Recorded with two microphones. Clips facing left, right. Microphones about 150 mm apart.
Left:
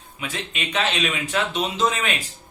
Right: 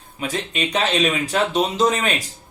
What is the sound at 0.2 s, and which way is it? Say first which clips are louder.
Speech: right 6 dB; 40° right (ahead or behind).